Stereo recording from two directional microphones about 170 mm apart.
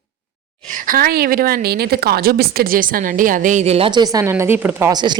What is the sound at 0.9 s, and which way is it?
Speech, 60° right (ahead or behind).